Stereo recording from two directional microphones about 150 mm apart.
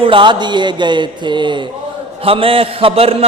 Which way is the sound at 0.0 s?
35° right (ahead or behind).